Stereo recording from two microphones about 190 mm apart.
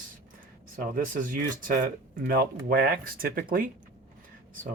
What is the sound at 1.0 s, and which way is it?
Speech, 45° right (ahead or behind).